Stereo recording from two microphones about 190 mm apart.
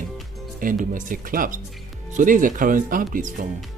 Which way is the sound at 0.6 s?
45° right (ahead or behind).